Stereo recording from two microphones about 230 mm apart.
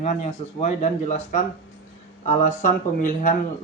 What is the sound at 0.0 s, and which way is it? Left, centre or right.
Speech, left.